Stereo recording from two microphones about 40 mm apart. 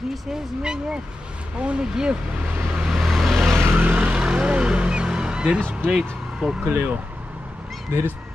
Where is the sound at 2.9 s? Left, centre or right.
Centre.